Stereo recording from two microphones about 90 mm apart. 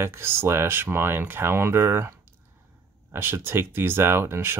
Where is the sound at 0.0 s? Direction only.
30° right (ahead or behind).